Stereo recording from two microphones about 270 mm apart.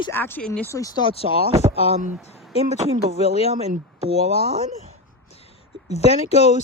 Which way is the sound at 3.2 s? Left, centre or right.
Left.